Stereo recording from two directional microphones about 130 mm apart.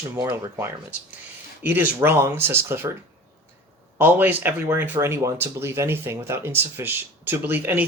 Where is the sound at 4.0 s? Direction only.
15° right (ahead or behind).